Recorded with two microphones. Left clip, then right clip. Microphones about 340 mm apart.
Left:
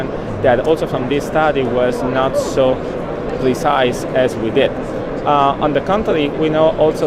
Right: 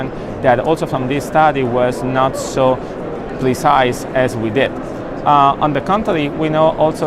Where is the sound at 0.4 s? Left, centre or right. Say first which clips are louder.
Even; right.